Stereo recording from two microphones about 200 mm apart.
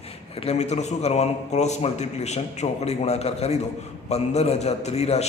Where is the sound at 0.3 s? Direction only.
30° left (ahead or behind).